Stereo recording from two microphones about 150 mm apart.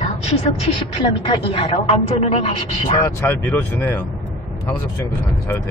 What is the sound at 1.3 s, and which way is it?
A woman's voice, 40° left (ahead or behind).